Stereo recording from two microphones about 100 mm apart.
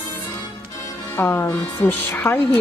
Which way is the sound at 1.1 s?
25° left (ahead or behind).